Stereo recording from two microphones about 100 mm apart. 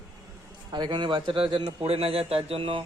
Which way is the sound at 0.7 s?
50° right (ahead or behind).